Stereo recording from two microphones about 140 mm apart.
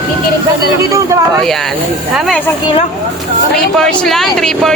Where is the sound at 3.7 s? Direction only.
5° left (ahead or behind).